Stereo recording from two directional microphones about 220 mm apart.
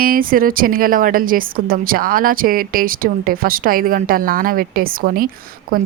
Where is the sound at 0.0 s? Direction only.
40° right (ahead or behind).